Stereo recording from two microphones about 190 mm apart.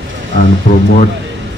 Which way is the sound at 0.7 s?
50° left (ahead or behind).